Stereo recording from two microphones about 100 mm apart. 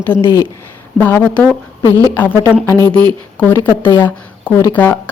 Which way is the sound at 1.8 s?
35° right (ahead or behind).